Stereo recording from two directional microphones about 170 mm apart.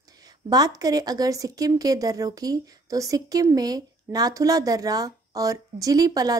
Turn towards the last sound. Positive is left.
turn(degrees=-20)  # may be behind; listen again after turning